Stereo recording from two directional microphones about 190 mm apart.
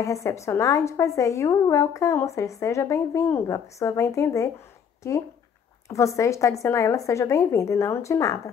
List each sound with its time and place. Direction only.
0.0 s speech: 15° left (ahead or behind)
5.9 s speech: 15° left (ahead or behind)